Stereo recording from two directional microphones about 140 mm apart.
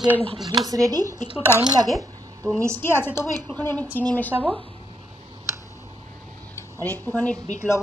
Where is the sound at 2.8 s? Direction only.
15° left (ahead or behind).